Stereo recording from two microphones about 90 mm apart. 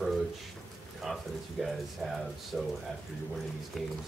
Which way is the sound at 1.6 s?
Centre (ahead or behind).